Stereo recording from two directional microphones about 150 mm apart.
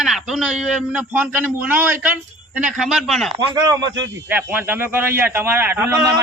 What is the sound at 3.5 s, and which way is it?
Speech, 25° right (ahead or behind).